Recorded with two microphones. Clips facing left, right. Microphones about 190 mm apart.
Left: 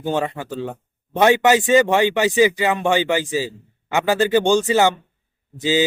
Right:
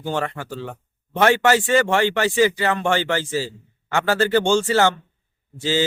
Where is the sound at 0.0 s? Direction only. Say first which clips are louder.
Left 3 dB; 20° left (ahead or behind).